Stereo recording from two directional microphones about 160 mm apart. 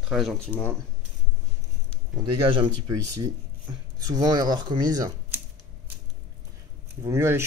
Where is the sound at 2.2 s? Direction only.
35° right (ahead or behind).